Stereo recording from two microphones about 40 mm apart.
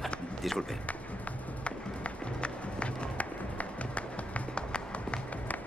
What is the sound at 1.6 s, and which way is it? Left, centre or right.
Music, left.